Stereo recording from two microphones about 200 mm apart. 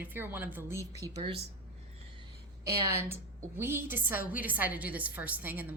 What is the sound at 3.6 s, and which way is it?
A woman's voice, 10° right (ahead or behind).